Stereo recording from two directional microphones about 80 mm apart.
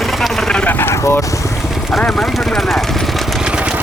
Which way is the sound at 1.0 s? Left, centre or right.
Left.